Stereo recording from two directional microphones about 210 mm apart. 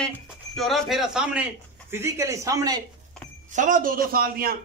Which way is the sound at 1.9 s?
15° right (ahead or behind).